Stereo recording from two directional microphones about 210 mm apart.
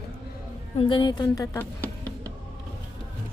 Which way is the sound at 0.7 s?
25° left (ahead or behind).